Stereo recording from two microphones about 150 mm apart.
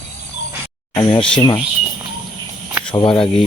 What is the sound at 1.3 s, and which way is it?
Speech, 30° left (ahead or behind).